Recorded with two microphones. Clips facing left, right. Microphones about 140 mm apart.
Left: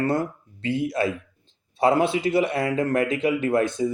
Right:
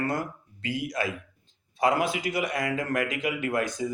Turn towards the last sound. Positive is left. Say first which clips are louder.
# left 6 dB
turn(degrees=30)  # may be behind; listen again after turning